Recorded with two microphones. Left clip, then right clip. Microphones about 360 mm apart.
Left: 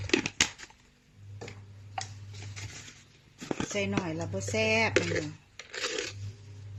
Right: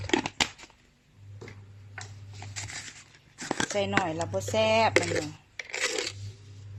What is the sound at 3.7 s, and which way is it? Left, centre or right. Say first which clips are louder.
Speech: right 5 dB; right.